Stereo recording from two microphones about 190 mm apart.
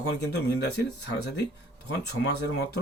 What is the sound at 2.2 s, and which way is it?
Speech, 60° left (ahead or behind).